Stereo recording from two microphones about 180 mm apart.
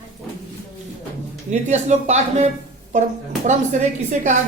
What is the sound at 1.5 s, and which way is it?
A woman's voice, 40° right (ahead or behind).